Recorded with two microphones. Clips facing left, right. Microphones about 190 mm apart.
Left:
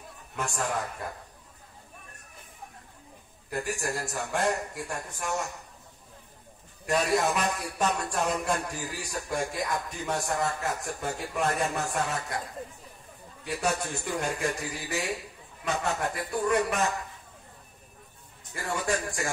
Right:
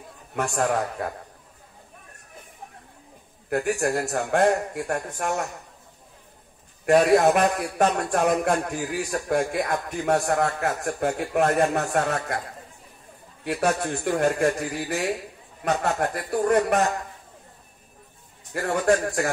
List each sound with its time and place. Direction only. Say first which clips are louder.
0.3 s speech: right 7 dB; 65° right (ahead or behind)
3.4 s speech: right 8 dB; 60° right (ahead or behind)
6.9 s speech: right 9 dB; 60° right (ahead or behind)
13.5 s a man's voice: right 6 dB; 65° right (ahead or behind)
18.5 s speech: right 9 dB; 55° right (ahead or behind)